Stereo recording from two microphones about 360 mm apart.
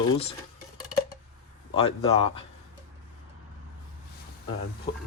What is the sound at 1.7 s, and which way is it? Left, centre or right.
Speech, centre.